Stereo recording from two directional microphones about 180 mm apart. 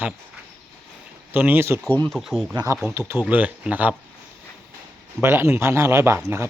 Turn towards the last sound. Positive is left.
turn(degrees=-15)  # may be behind; listen again after turning